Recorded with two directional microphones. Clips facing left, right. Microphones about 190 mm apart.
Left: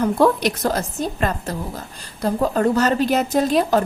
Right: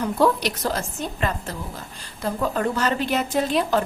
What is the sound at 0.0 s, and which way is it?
A woman's voice, 50° left (ahead or behind).